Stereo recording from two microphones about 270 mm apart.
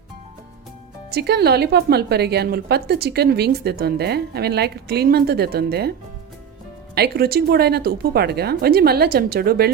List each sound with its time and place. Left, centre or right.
1.1 s a woman's voice: right
6.9 s a woman's voice: right